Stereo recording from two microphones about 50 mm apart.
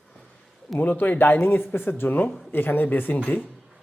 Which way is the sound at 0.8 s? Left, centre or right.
Left.